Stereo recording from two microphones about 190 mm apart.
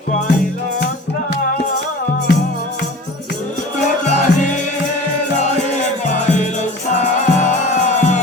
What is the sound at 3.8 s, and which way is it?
Music, 40° left (ahead or behind).